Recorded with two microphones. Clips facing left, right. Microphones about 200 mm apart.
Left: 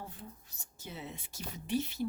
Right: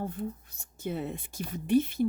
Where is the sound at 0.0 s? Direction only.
50° right (ahead or behind).